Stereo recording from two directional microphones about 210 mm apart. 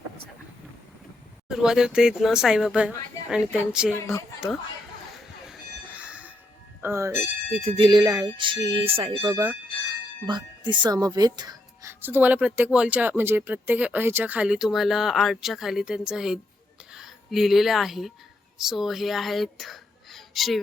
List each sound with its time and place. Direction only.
1.5 s speech: 5° right (ahead or behind)
5.1 s train: 5° right (ahead or behind)
6.8 s speech: 15° right (ahead or behind)
7.5 s speech: 30° right (ahead or behind); by 9.6 s 10° right (ahead or behind)
10.2 s speech: 20° right (ahead or behind); by 20.6 s centre (ahead or behind)